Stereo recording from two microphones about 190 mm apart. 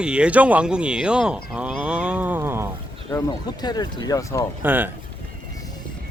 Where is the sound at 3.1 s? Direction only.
20° left (ahead or behind).